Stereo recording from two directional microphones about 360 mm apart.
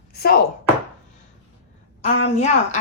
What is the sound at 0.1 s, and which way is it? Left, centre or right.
Chopping, left.